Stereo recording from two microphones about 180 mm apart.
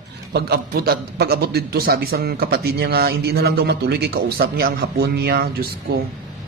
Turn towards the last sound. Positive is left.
turn(degrees=-60)  # may be behind; listen again after turning